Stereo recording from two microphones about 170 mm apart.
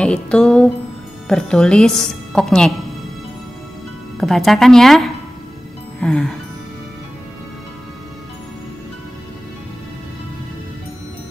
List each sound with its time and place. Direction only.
0.0 s speech: 5° left (ahead or behind)
4.2 s speech: centre (ahead or behind)
5.9 s music: 5° left (ahead or behind)